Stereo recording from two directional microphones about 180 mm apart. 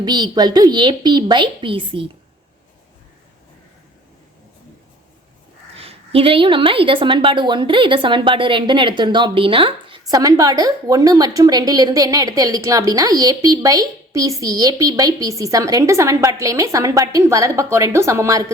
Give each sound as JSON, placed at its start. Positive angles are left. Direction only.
{"t": 0.0, "sound": "a woman's voice", "side_deg": -25}
{"t": 5.7, "sound": "a woman's voice", "side_deg": -35}